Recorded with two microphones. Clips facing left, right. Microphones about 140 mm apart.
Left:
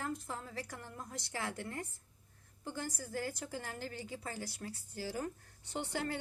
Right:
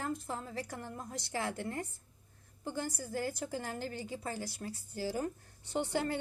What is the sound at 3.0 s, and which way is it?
A woman's voice, 30° right (ahead or behind).